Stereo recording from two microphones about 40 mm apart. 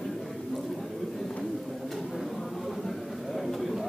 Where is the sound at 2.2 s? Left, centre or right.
Centre.